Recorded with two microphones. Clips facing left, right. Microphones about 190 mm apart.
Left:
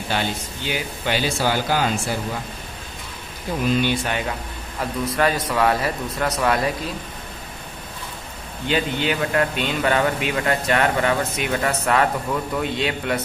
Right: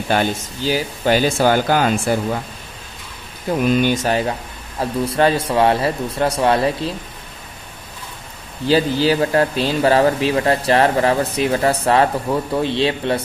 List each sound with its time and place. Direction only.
0.1 s speech: 45° right (ahead or behind)
3.8 s a man's voice: 40° right (ahead or behind)
8.6 s a man's voice: 35° right (ahead or behind)